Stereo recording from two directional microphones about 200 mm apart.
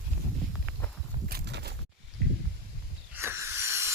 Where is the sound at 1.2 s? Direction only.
55° right (ahead or behind).